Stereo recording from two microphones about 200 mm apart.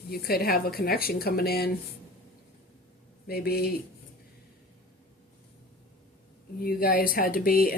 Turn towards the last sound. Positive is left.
turn(degrees=45)  # may be behind; listen again after turning